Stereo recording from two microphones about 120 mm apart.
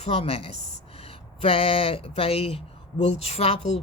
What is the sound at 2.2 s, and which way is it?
Speech, 55° left (ahead or behind).